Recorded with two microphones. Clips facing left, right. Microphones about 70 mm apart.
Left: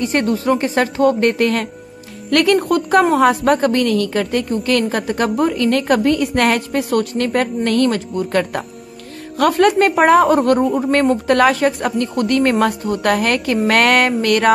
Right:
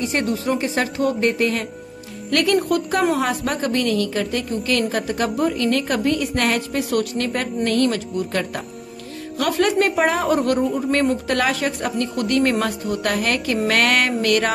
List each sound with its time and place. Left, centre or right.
0.1 s a woman's voice: left
14.2 s music: left